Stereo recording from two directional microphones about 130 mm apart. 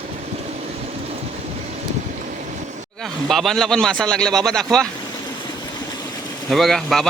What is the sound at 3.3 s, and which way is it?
Speech, centre (ahead or behind).